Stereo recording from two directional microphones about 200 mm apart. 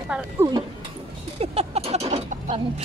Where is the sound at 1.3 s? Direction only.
30° right (ahead or behind).